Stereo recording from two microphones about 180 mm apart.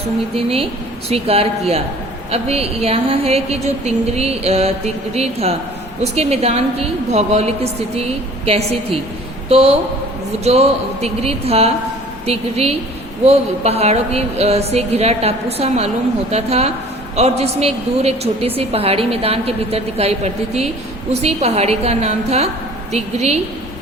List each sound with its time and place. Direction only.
0.3 s a woman's voice: 30° right (ahead or behind)